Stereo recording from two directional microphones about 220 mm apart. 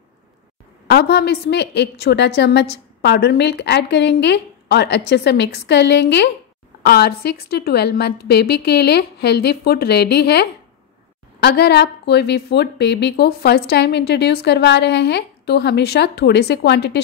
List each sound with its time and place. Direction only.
0.8 s a woman's voice: 45° left (ahead or behind)